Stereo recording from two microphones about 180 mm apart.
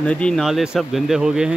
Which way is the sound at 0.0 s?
5° left (ahead or behind).